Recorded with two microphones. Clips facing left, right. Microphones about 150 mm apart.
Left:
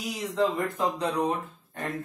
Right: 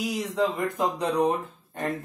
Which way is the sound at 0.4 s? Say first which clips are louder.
Even; 10° right (ahead or behind).